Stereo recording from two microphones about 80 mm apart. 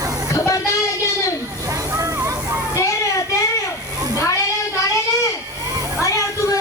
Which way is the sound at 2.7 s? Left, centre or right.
Left.